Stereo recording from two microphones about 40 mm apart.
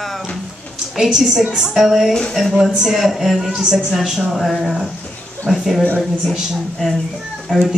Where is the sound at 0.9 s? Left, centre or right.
Centre.